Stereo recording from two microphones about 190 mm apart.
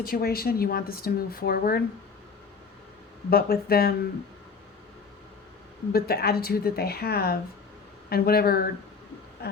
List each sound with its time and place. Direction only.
0.0 s speech: 55° left (ahead or behind)
3.2 s speech: 50° left (ahead or behind)
5.9 s a woman's voice: 55° left (ahead or behind)
9.4 s a sound: 55° left (ahead or behind)